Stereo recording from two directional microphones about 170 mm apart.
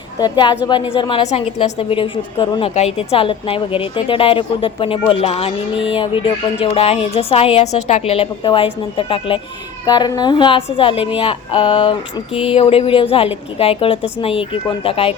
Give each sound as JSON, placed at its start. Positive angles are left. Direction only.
{"t": 0.2, "sound": "a woman's voice", "side_deg": 25}